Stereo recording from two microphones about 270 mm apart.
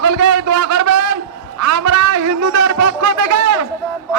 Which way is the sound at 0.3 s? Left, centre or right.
Right.